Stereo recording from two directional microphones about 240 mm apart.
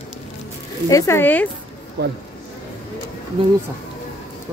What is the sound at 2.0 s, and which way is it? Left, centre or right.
Speech, right.